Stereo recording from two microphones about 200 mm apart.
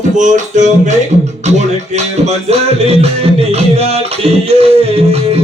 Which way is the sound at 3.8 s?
30° right (ahead or behind).